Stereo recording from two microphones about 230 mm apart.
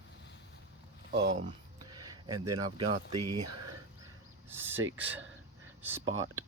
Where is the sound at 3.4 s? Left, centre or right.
Right.